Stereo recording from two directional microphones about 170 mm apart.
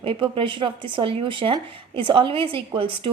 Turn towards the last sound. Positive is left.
turn(degrees=-30)  # may be behind; listen again after turning